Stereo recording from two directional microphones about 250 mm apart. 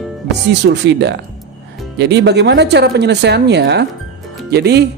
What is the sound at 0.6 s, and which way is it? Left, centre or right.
A woman's voice, right.